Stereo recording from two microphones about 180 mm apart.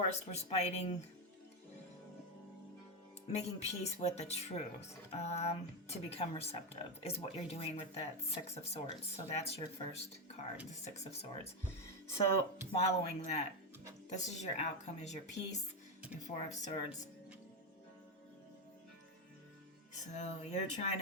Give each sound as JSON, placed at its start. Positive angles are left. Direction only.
{"t": 0.1, "sound": "speech", "side_deg": 35}
{"t": 3.2, "sound": "speech", "side_deg": 40}
{"t": 12.7, "sound": "speech", "side_deg": 40}
{"t": 16.2, "sound": "speech", "side_deg": 40}
{"t": 20.1, "sound": "speech", "side_deg": 40}